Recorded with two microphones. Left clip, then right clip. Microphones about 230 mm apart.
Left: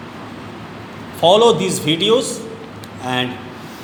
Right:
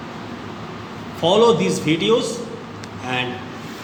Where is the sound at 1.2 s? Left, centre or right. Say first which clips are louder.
Left 3 dB; left.